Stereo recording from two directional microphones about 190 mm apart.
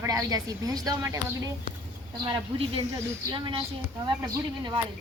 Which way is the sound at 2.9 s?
20° right (ahead or behind).